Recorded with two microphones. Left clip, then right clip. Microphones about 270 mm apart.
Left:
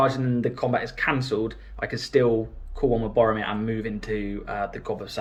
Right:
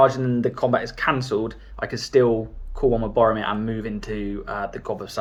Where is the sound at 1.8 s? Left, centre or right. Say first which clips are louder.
Right 1 dB; right.